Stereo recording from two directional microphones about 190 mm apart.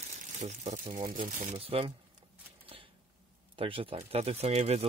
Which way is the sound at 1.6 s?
30° right (ahead or behind).